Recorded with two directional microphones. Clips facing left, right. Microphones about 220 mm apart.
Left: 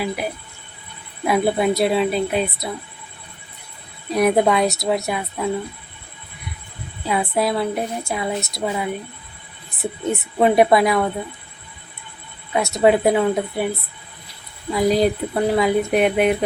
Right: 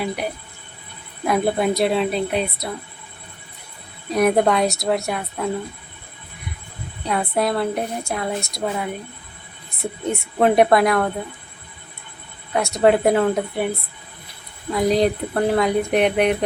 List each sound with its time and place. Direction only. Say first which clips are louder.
1.3 s speech: left 1 dB; 5° left (ahead or behind)
4.1 s speech: even; centre (ahead or behind)
7.0 s speech: left 1 dB; centre (ahead or behind)
12.5 s speech: even; centre (ahead or behind)
14.7 s speech: left 1 dB; centre (ahead or behind)